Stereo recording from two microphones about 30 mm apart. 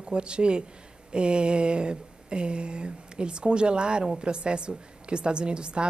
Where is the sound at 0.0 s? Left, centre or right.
Right.